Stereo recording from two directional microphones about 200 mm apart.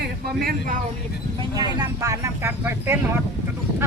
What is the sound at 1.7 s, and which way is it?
Speech, 15° right (ahead or behind).